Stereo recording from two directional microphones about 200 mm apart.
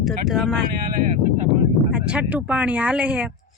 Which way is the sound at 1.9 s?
5° right (ahead or behind).